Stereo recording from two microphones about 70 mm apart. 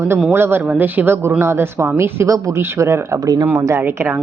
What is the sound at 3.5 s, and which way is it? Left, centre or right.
Speech, right.